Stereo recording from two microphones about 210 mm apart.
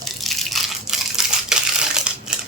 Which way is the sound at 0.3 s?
Centre (ahead or behind).